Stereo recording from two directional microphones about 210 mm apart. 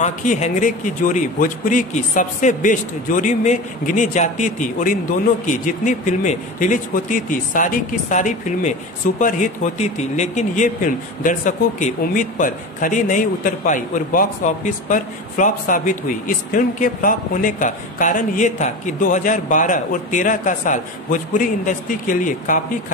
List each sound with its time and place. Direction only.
0.0 s speech: 35° left (ahead or behind)